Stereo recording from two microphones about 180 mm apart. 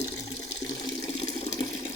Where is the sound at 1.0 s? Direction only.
35° left (ahead or behind).